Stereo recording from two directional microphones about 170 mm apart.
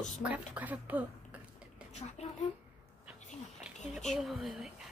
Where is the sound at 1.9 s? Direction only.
40° left (ahead or behind).